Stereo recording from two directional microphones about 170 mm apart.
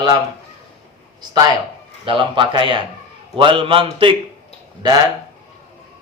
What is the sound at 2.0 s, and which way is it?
A man's voice, 30° right (ahead or behind).